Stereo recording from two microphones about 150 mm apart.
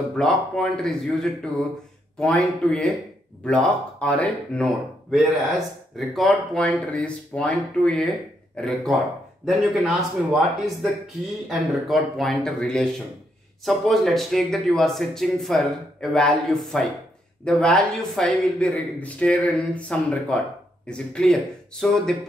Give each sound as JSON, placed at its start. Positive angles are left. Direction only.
{"t": 0.1, "sound": "speech", "side_deg": 5}